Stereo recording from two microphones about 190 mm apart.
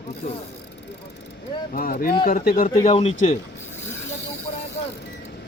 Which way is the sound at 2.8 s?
30° left (ahead or behind).